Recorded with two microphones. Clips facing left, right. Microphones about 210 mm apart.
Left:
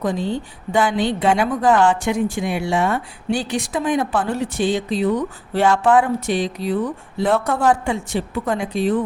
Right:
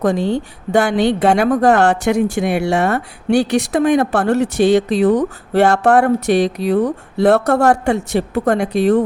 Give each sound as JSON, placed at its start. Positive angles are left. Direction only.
{"t": 0.0, "sound": "speech", "side_deg": -75}
{"t": 5.5, "sound": "speech", "side_deg": -65}